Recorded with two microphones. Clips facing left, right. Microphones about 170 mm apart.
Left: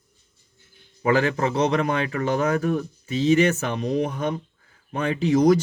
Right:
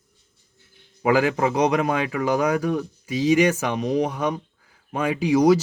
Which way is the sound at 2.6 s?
80° right.